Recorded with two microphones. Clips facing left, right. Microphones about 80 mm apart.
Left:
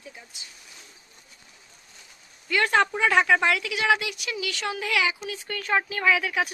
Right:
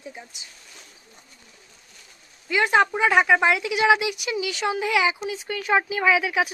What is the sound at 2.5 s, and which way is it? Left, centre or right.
A woman's voice, centre.